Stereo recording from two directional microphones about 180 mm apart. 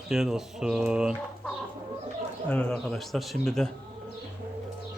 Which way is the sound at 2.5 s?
5° left (ahead or behind).